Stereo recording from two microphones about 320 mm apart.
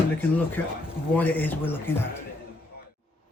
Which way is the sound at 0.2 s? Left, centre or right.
Centre.